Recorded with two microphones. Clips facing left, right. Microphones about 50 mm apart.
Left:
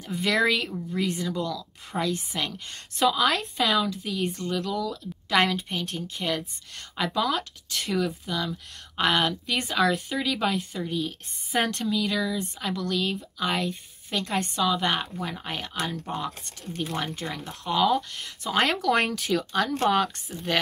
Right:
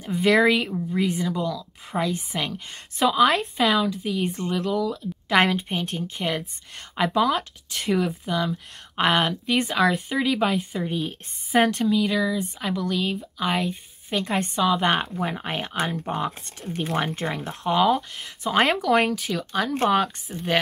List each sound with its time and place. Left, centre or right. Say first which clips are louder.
0.2 s a woman's voice: right 5 dB; centre
4.3 s speech: right 3 dB; right
4.6 s a woman's voice: right 6 dB; centre
14.1 s speech: right 3 dB; right
17.5 s a woman's voice: right 3 dB; centre
20.3 s speech: right 4 dB; centre